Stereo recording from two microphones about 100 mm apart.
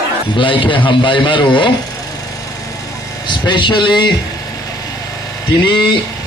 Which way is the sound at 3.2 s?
50° left (ahead or behind).